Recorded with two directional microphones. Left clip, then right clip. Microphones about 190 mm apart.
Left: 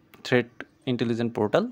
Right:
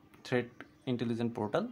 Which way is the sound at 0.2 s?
40° left (ahead or behind).